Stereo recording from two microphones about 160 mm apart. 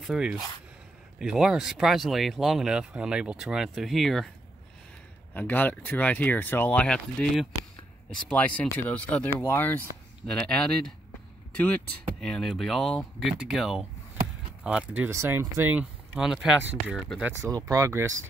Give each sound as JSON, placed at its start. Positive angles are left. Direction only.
{"t": 0.0, "sound": "speech", "side_deg": -5}
{"t": 5.3, "sound": "speech", "side_deg": 10}
{"t": 12.2, "sound": "speech", "side_deg": 5}